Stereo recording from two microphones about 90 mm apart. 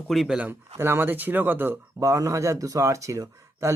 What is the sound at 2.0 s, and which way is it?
Speech, 35° right (ahead or behind).